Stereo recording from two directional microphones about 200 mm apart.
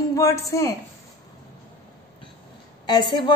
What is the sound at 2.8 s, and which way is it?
Speech, 20° left (ahead or behind).